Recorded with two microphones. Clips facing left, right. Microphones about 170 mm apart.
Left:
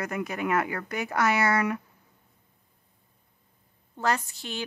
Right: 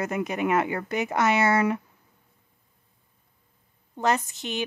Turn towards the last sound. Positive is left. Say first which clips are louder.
# right 4 dB
turn(degrees=-20)  # may be behind; listen again after turning